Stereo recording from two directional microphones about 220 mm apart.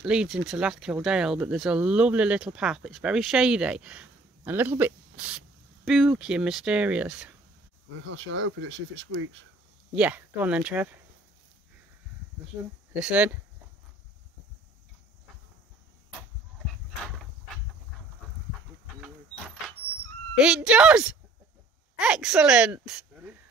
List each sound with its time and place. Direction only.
0.0 s speech: 5° right (ahead or behind)
8.0 s speech: 60° right (ahead or behind)
9.9 s speech: 5° right (ahead or behind)
12.9 s speech: 5° right (ahead or behind)
20.3 s speech: 5° right (ahead or behind)